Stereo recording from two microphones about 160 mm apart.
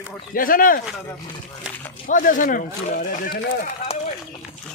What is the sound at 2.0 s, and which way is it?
Speech, 60° left (ahead or behind).